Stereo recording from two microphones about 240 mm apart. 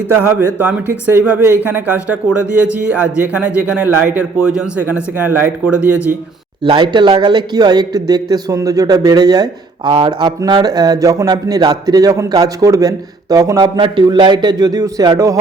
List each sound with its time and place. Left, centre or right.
0.1 s speech: centre
6.7 s speech: centre